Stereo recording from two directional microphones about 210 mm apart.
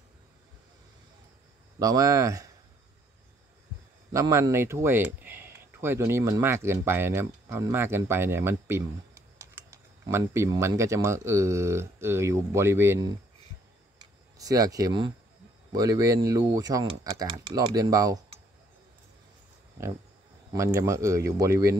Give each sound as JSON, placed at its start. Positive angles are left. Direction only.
{"t": 1.8, "sound": "speech", "side_deg": -15}
{"t": 4.1, "sound": "speech", "side_deg": -15}
{"t": 14.4, "sound": "speech", "side_deg": -15}
{"t": 20.5, "sound": "speech", "side_deg": -15}